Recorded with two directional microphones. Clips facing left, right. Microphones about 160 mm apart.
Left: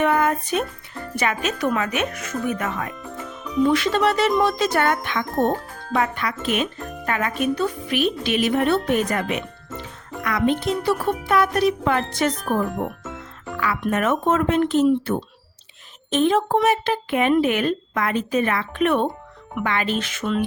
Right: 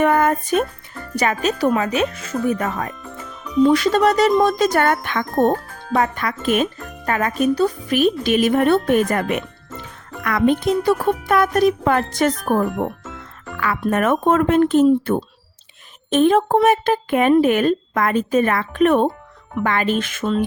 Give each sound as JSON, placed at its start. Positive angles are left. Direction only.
{"t": 0.0, "sound": "music", "side_deg": -45}
{"t": 1.1, "sound": "speech", "side_deg": -40}
{"t": 13.8, "sound": "speech", "side_deg": -50}
{"t": 16.0, "sound": "speech", "side_deg": -50}